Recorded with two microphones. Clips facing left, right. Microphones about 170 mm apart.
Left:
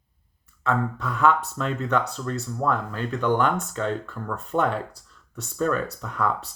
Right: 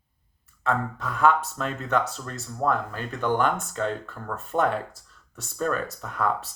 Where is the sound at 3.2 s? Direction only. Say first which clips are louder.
Left 1 dB; 40° right (ahead or behind).